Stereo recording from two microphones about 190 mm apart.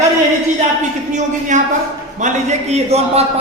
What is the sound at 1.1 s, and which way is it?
A man's voice, 40° right (ahead or behind).